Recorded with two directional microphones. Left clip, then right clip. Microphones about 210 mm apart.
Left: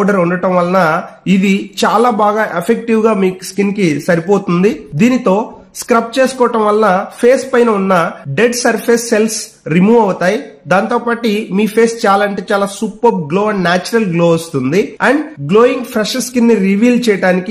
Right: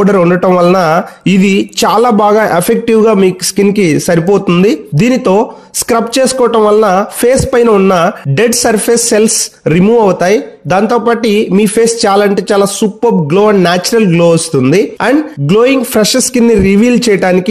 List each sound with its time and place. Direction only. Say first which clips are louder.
0.0 s speech: right 5 dB; 40° right (ahead or behind)